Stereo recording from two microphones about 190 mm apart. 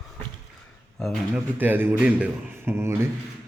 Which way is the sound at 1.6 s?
10° right (ahead or behind).